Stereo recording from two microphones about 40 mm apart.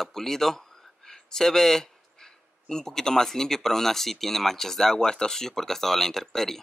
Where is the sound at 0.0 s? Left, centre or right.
Centre.